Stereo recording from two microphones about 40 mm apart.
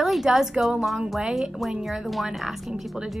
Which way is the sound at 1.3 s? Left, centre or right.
Centre.